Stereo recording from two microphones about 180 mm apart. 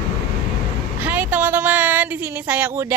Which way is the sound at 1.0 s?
10° right (ahead or behind).